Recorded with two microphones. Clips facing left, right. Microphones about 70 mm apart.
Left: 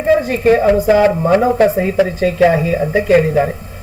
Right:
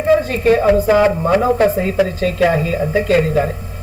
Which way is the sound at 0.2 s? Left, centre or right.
Centre.